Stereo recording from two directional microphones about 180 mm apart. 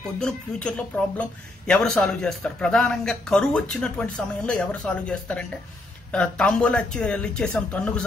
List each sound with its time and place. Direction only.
0.2 s speech: 5° left (ahead or behind)